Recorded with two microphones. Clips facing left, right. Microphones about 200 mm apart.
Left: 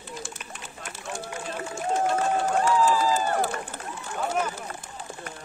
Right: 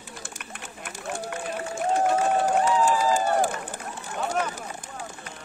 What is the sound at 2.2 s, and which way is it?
Run, 15° right (ahead or behind).